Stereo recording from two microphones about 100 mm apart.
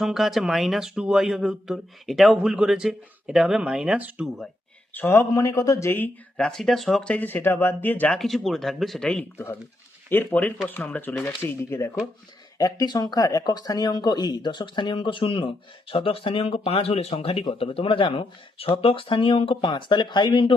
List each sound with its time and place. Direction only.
0.0 s speech: centre (ahead or behind)
4.9 s speech: 20° left (ahead or behind)
5.3 s speech: 35° left (ahead or behind)
6.3 s speech: 5° left (ahead or behind)
8.2 s speech: centre (ahead or behind)
10.1 s speech: 20° left (ahead or behind)
12.5 s speech: 35° left (ahead or behind); by 20.5 s 50° left (ahead or behind)